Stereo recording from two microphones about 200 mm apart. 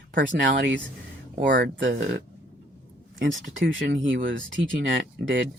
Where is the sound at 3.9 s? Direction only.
70° right (ahead or behind).